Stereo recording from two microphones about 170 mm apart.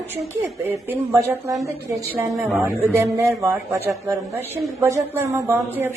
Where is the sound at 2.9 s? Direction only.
20° right (ahead or behind).